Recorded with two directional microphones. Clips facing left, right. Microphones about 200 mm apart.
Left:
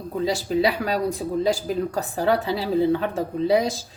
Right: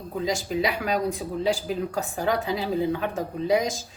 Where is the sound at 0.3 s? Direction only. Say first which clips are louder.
Left 4 dB; 35° left (ahead or behind).